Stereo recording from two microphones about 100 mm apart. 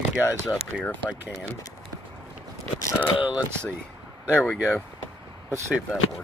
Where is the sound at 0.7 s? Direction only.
Centre (ahead or behind).